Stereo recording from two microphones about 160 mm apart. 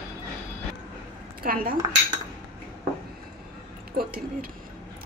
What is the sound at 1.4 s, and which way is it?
Speech, 65° right (ahead or behind).